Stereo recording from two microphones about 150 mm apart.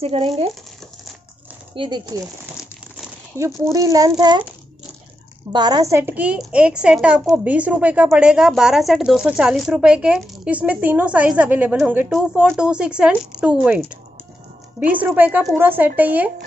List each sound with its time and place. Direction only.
0.0 s speech: 40° right (ahead or behind)
1.8 s speech: 30° right (ahead or behind)
3.3 s speech: 20° right (ahead or behind)
5.5 s a woman's voice: 25° right (ahead or behind); by 16.3 s 10° right (ahead or behind)